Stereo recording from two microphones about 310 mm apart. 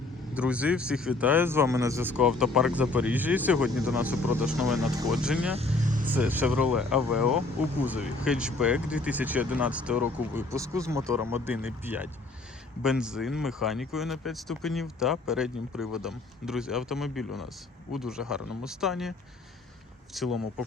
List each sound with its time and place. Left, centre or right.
0.3 s speech: centre
5.5 s vehicle: right
6.1 s speech: centre
20.1 s speech: centre